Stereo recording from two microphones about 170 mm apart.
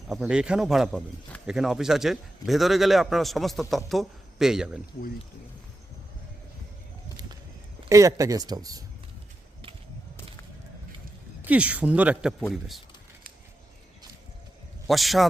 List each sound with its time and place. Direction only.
0.1 s a man's voice: 5° right (ahead or behind)
7.9 s speech: 20° right (ahead or behind)
11.4 s speech: 10° right (ahead or behind)
14.8 s a man's voice: centre (ahead or behind)